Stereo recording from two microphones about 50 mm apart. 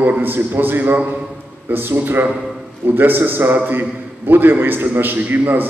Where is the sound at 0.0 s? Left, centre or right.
Right.